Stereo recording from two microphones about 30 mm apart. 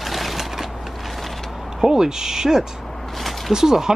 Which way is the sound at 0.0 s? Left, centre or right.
Centre.